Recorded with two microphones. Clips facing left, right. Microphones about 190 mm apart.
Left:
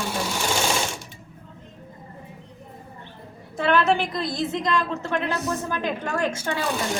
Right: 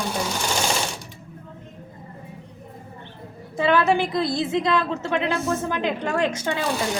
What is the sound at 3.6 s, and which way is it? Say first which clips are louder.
Speech: right 1 dB; 15° right (ahead or behind).